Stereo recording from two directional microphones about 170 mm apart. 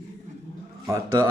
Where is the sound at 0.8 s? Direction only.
15° right (ahead or behind).